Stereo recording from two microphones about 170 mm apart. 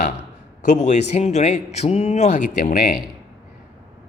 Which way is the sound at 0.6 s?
45° left (ahead or behind).